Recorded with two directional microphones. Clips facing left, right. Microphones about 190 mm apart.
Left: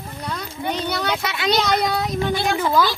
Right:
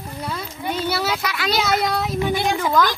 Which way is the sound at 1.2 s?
25° left (ahead or behind).